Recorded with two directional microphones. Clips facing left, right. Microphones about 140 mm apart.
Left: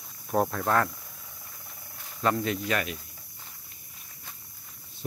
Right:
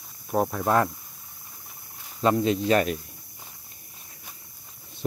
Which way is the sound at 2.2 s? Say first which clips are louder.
Right 5 dB; 20° right (ahead or behind).